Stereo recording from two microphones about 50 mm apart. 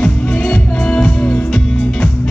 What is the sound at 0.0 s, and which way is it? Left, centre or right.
Music, left.